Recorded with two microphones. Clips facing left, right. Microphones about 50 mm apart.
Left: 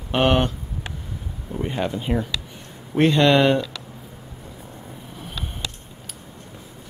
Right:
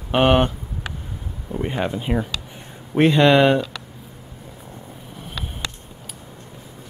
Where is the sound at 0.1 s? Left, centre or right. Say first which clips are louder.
Right 3 dB; centre.